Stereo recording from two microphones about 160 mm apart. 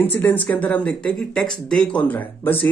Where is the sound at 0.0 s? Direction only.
10° left (ahead or behind).